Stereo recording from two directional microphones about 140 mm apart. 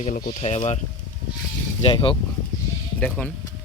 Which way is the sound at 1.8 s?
40° left (ahead or behind).